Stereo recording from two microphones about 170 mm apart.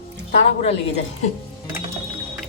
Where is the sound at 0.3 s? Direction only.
40° left (ahead or behind).